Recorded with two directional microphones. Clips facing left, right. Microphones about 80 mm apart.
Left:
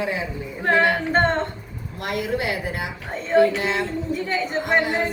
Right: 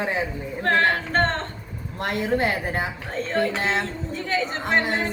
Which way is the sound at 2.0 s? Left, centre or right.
Right.